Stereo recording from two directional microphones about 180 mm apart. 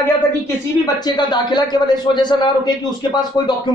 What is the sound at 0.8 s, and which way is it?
A man's voice, 25° left (ahead or behind).